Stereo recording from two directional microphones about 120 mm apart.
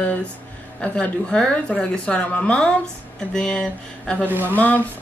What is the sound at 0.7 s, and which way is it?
A woman's voice, 5° left (ahead or behind).